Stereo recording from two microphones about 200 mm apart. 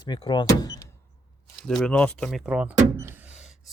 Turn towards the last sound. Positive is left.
turn(degrees=-5)  # may be behind; listen again after turning